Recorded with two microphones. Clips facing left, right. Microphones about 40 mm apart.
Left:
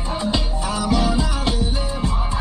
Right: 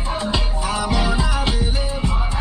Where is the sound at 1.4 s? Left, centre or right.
Right.